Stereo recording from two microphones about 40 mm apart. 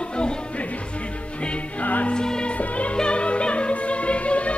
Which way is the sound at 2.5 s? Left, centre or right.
Left.